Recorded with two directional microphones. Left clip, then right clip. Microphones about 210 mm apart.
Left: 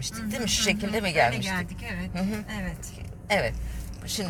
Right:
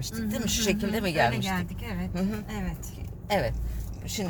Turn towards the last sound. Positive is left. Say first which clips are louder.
# left 2 dB
turn(degrees=-20)  # may be behind; listen again after turning